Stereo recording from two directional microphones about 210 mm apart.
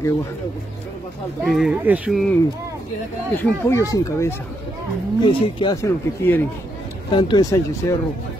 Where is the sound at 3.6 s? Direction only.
15° left (ahead or behind).